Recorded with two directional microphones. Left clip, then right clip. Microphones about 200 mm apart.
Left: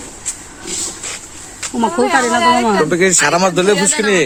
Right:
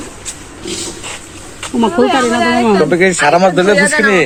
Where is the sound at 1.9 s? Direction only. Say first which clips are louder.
Right 2 dB; 35° left (ahead or behind).